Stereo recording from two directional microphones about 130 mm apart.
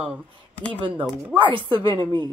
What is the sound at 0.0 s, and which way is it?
Speech, 10° right (ahead or behind).